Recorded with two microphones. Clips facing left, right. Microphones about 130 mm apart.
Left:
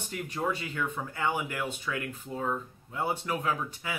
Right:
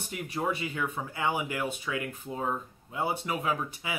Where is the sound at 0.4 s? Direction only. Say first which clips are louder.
Right 1 dB; 15° right (ahead or behind).